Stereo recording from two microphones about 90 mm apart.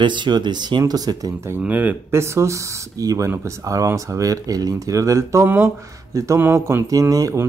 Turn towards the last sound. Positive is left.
turn(degrees=-35)  # may be behind; listen again after turning